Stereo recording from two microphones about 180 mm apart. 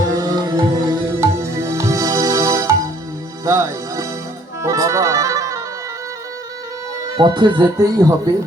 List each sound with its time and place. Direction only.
0.1 s music: 20° right (ahead or behind)
7.2 s speech: 25° right (ahead or behind)